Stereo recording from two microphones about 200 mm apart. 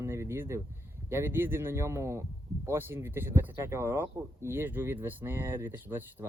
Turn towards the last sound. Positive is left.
turn(degrees=-10)  # may be behind; listen again after turning